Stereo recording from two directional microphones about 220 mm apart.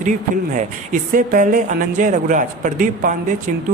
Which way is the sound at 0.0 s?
35° right (ahead or behind).